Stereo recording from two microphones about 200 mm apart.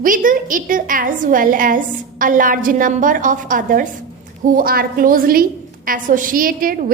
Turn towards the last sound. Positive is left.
turn(degrees=-45)  # may be behind; listen again after turning